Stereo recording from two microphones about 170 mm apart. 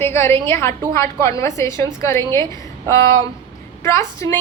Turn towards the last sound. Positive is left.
turn(degrees=20)  # may be behind; listen again after turning